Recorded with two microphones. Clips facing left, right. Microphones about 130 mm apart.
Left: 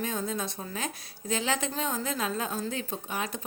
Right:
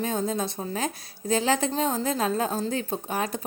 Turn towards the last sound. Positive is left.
turn(degrees=-40)  # may be behind; listen again after turning